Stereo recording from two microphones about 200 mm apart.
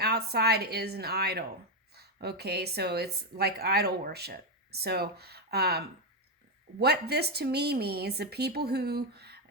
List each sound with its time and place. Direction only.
0.0 s speech: 55° right (ahead or behind)